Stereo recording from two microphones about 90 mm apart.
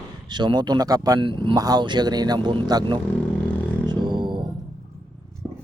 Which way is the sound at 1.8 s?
55° right (ahead or behind).